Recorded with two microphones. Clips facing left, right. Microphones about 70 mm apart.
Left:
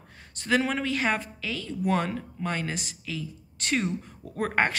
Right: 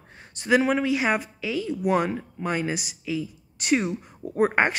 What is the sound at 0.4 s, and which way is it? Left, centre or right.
A woman's voice, centre.